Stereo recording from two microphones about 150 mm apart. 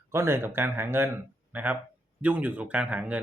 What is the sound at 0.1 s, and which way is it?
Speech, 15° right (ahead or behind).